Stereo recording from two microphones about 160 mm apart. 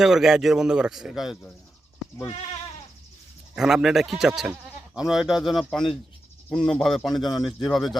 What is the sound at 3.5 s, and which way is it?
Speech, 5° right (ahead or behind).